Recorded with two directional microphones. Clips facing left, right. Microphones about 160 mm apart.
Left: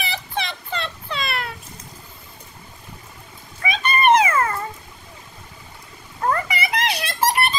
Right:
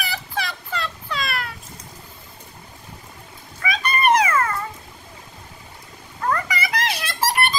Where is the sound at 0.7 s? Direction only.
30° left (ahead or behind).